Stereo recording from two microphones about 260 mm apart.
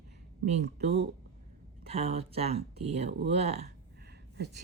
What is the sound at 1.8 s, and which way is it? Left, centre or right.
Speech, right.